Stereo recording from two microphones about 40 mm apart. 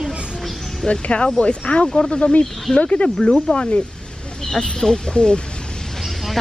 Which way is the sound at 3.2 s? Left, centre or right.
Centre.